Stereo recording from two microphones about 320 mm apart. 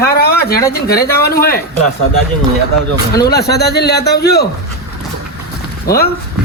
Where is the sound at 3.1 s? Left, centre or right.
Left.